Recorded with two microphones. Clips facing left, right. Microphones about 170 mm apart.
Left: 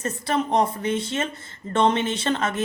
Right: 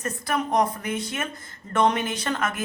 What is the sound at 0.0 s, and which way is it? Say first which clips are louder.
A woman's voice: left 2 dB; 25° left (ahead or behind).